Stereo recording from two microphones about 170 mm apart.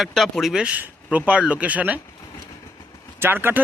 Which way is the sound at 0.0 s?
Centre (ahead or behind).